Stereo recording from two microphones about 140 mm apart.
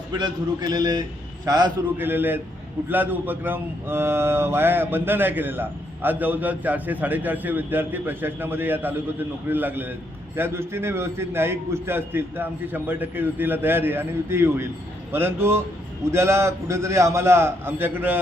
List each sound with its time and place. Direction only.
0.7 s a man's voice: 30° right (ahead or behind)
2.0 s a man's voice: 15° right (ahead or behind)